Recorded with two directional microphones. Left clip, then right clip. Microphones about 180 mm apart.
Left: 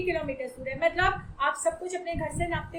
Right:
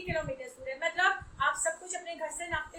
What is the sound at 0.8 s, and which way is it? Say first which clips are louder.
A woman's voice: left 3 dB; 25° left (ahead or behind).